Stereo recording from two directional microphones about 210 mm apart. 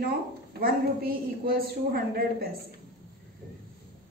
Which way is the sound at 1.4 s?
45° right (ahead or behind).